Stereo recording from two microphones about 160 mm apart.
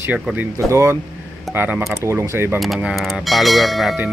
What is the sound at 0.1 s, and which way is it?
A man's voice, 10° right (ahead or behind).